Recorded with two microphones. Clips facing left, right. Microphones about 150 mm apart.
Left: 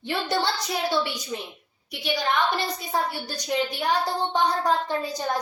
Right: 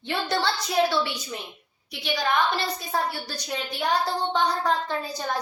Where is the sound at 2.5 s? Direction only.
15° left (ahead or behind).